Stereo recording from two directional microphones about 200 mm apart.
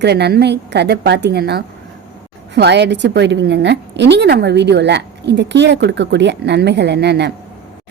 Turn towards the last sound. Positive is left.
turn(degrees=-55)  # may be behind; listen again after turning